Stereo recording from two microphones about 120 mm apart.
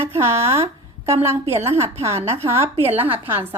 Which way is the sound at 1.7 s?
20° right (ahead or behind).